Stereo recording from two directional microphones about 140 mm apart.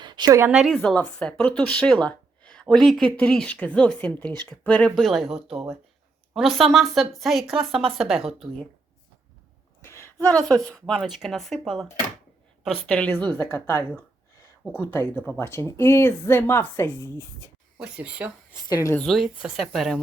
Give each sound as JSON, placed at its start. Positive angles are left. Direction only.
{"t": 0.0, "sound": "a sound", "side_deg": -30}
{"t": 0.5, "sound": "speech", "side_deg": 0}
{"t": 4.9, "sound": "speech", "side_deg": 0}
{"t": 9.8, "sound": "a sound", "side_deg": 20}
{"t": 10.3, "sound": "speech", "side_deg": 5}
{"t": 17.7, "sound": "speech", "side_deg": -10}
{"t": 18.7, "sound": "speech", "side_deg": 25}
{"t": 18.9, "sound": "speech", "side_deg": 0}